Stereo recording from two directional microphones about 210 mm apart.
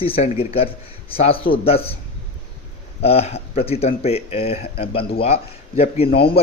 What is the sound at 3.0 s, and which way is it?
A man's voice, 30° left (ahead or behind).